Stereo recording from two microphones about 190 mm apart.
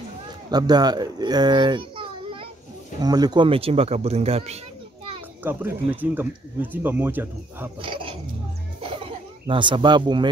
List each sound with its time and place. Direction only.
0.5 s a child's voice: 20° right (ahead or behind)
5.4 s speech: 10° right (ahead or behind)
7.8 s dog: 25° right (ahead or behind)
9.0 s speech: 25° right (ahead or behind)